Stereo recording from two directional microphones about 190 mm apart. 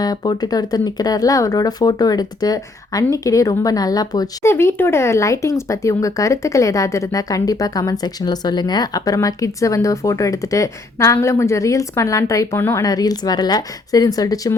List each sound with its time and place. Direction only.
0.0 s speech: 20° left (ahead or behind)